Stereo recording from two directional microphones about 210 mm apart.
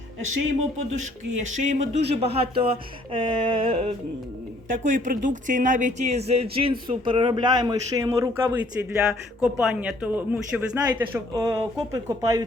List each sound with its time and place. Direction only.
1.4 s speech: 35° right (ahead or behind)
4.8 s speech: 40° right (ahead or behind); by 12.5 s 15° right (ahead or behind)